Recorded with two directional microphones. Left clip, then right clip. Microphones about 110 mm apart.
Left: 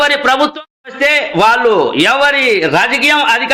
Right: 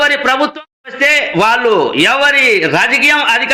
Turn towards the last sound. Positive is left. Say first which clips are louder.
# even
turn(degrees=0)  # may be behind; listen again after turning